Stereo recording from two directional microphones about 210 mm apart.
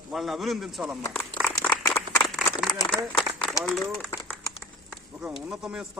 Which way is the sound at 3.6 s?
Centre (ahead or behind).